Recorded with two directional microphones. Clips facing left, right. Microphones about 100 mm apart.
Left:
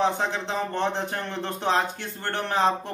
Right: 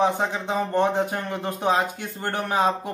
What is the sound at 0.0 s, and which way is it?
Speech, 15° right (ahead or behind).